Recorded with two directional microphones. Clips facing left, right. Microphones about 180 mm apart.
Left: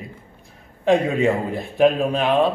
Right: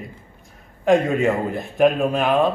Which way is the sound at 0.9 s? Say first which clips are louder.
Even; centre (ahead or behind).